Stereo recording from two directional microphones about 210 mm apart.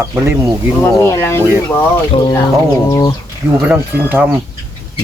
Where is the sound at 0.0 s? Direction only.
10° right (ahead or behind).